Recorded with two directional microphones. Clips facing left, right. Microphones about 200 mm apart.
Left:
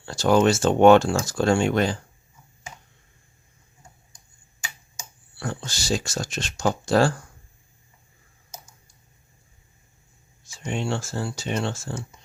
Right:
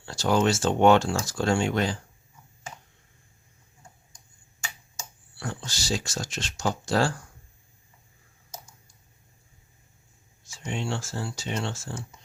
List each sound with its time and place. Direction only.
0.0 s speech: 60° left (ahead or behind)
5.4 s speech: 55° left (ahead or behind)
10.6 s speech: 60° left (ahead or behind)
11.2 s speech: 45° left (ahead or behind)